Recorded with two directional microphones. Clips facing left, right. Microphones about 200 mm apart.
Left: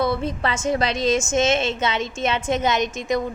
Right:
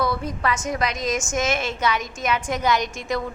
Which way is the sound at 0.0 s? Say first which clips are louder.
Left 2 dB; 25° left (ahead or behind).